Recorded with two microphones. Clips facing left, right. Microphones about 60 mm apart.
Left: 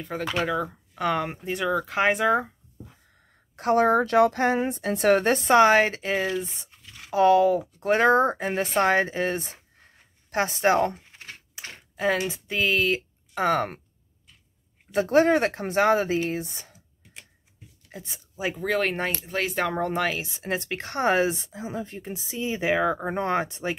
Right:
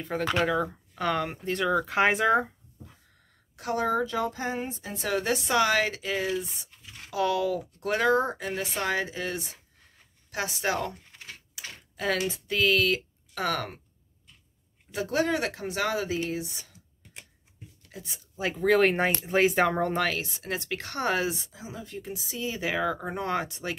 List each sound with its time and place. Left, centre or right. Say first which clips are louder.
0.0 s speech: right 1 dB; centre
1.7 s speech: left 1 dB; centre
3.5 s a woman's voice: left 7 dB; left
11.1 s a sound: left 2 dB; left
12.0 s speech: left 3 dB; centre
14.9 s speech: left 7 dB; left
17.9 s speech: left 2 dB; left
18.3 s speech: right 3 dB; centre
20.2 s speech: left 3 dB; centre